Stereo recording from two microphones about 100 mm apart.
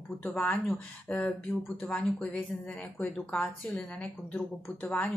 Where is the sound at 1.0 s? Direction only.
5° left (ahead or behind).